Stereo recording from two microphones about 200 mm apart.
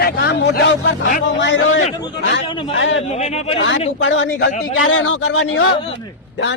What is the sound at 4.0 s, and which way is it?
A man's voice, 70° left (ahead or behind).